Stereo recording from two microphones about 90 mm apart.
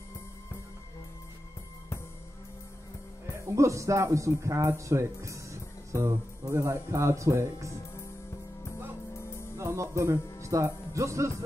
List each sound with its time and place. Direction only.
3.4 s speech: 35° right (ahead or behind)
9.1 s music: 30° left (ahead or behind)
9.6 s speech: 35° right (ahead or behind)